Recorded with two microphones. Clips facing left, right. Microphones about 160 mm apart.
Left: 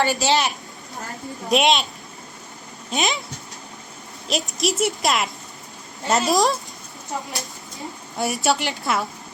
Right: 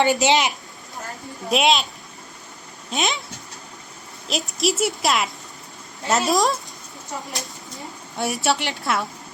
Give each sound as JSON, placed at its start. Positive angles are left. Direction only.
{"t": 0.0, "sound": "a woman's voice", "side_deg": -20}
{"t": 1.5, "sound": "a woman's voice", "side_deg": 0}
{"t": 2.9, "sound": "a woman's voice", "side_deg": 0}
{"t": 4.3, "sound": "a woman's voice", "side_deg": 0}
{"t": 8.1, "sound": "a woman's voice", "side_deg": 0}